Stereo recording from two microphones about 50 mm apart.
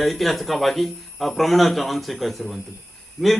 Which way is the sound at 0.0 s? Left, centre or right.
Centre.